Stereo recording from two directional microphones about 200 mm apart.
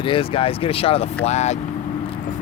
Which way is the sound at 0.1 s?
25° left (ahead or behind).